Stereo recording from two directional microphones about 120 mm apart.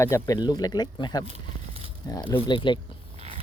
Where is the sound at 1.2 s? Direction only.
65° right (ahead or behind).